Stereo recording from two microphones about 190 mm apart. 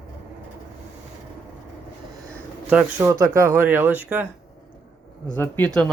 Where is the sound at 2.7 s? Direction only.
10° right (ahead or behind).